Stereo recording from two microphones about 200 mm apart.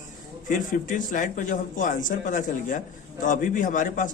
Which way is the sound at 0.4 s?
40° left (ahead or behind).